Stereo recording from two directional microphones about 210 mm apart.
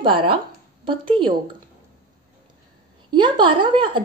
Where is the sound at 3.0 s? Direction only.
20° right (ahead or behind).